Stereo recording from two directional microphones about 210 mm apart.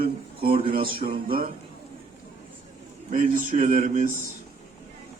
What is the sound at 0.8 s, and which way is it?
Music, 25° right (ahead or behind).